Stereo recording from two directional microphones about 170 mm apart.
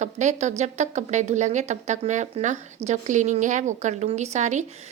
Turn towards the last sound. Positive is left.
turn(degrees=-45)  # may be behind; listen again after turning